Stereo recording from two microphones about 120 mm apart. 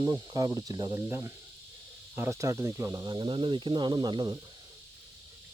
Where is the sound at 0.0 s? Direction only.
30° right (ahead or behind).